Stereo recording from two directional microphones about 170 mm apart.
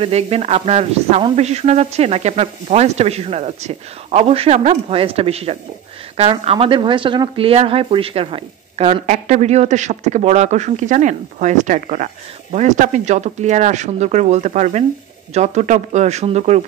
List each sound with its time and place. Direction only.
0.0 s speech: 35° right (ahead or behind)